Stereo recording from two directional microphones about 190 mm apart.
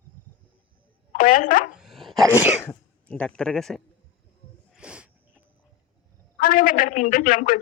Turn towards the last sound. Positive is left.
turn(degrees=45)  # may be behind; listen again after turning